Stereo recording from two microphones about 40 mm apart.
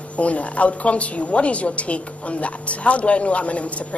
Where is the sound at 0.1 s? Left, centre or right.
Left.